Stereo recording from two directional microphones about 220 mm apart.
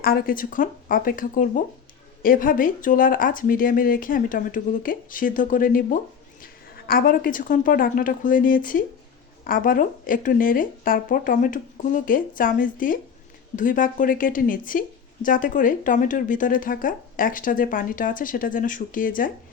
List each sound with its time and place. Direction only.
0.0 s a woman's voice: 40° left (ahead or behind)